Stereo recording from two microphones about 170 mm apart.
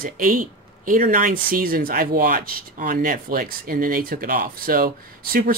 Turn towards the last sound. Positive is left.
turn(degrees=-60)  # may be behind; listen again after turning